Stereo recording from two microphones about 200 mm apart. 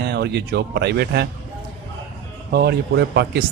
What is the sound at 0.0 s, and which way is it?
Speech, 55° right (ahead or behind).